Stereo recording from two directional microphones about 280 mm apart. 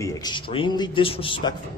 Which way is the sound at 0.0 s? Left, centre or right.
Centre.